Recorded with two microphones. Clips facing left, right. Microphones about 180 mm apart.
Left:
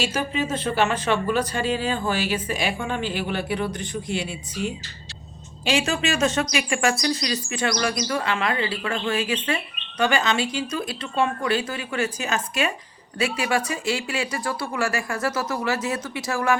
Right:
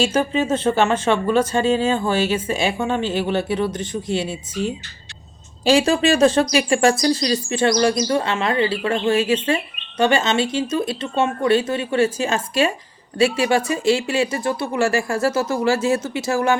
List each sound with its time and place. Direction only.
0.0 s speech: 25° right (ahead or behind)
5.6 s speech: 35° right (ahead or behind)